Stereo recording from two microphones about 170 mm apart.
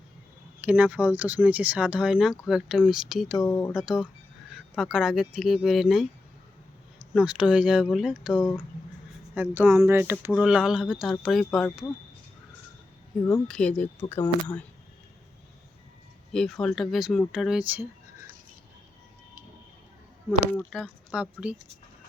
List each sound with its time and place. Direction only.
0.6 s speech: 10° right (ahead or behind)
3.4 s speech: 20° left (ahead or behind)
3.7 s speech: 5° right (ahead or behind)
7.1 s speech: 5° right (ahead or behind)
13.1 s speech: centre (ahead or behind)
16.3 s speech: 5° left (ahead or behind)
20.7 s speech: centre (ahead or behind)